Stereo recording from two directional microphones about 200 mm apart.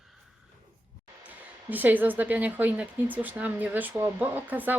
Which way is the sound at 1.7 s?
10° right (ahead or behind).